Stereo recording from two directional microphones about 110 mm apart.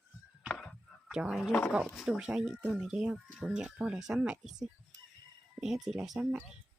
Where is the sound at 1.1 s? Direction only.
10° right (ahead or behind).